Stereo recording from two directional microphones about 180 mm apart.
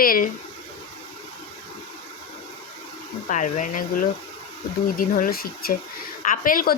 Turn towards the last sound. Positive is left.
turn(degrees=50)  # may be behind; listen again after turning